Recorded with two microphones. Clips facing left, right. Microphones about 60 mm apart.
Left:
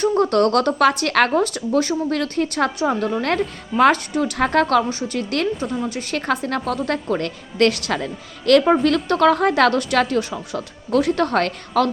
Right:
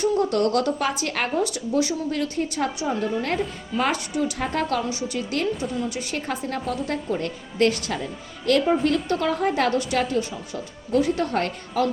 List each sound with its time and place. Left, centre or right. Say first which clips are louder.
0.2 s speech: left 5 dB; left
8.6 s a woman's voice: left 4 dB; left